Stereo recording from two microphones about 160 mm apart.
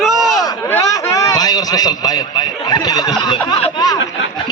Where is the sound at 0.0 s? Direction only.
Centre (ahead or behind).